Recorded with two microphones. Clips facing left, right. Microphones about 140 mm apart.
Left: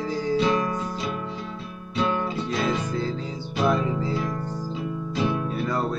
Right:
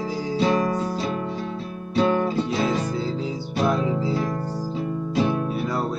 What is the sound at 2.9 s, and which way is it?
Music, 10° right (ahead or behind).